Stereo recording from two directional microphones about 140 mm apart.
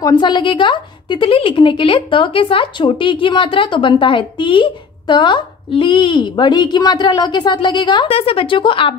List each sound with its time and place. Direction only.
0.0 s a woman's voice: 30° left (ahead or behind)